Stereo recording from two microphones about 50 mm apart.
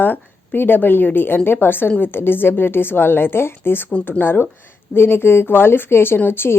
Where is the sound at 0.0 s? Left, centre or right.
Left.